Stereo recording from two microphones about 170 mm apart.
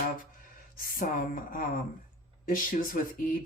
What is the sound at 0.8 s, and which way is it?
Speech, 55° left (ahead or behind).